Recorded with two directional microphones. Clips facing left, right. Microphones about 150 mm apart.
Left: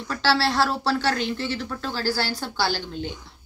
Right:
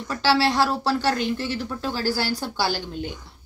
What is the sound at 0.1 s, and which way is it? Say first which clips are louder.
Speech: right 2 dB; 10° right (ahead or behind).